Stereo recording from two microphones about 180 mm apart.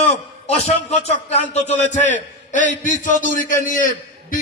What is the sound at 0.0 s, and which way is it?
A man's voice, 35° left (ahead or behind).